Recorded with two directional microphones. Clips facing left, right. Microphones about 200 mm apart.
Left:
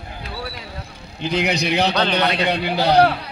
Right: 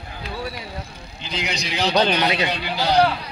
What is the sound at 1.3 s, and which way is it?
A man's voice, 60° left (ahead or behind).